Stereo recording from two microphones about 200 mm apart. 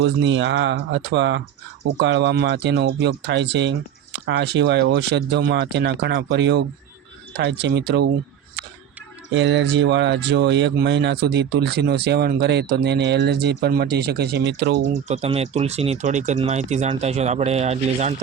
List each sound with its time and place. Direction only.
0.0 s speech: 65° right (ahead or behind)
9.3 s speech: 65° right (ahead or behind)
15.0 s speech: 30° right (ahead or behind)